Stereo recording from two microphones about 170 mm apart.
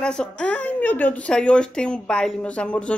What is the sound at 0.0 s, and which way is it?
Speech, 5° left (ahead or behind).